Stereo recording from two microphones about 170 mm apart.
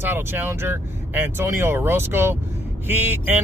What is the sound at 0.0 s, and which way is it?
Speech, 10° right (ahead or behind).